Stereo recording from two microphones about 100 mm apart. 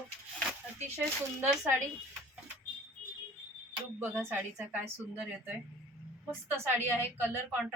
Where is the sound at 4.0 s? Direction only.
20° right (ahead or behind).